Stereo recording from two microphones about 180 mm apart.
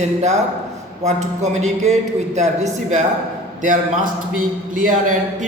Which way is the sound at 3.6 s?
45° right (ahead or behind).